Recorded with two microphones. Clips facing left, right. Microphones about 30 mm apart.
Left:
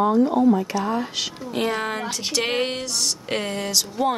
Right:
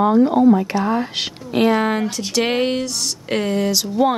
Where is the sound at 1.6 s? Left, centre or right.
Centre.